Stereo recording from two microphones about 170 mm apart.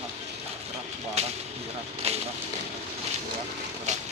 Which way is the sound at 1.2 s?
40° right (ahead or behind).